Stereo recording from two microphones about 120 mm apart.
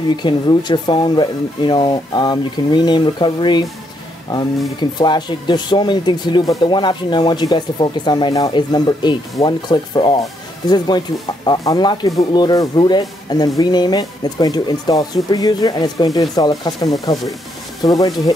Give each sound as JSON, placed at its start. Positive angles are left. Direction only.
{"t": 0.1, "sound": "speech", "side_deg": 40}